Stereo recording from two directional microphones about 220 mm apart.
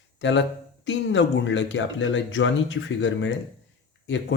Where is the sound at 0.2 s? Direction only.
55° left (ahead or behind).